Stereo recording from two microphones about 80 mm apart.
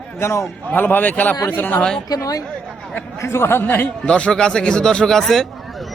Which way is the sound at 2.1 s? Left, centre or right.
Left.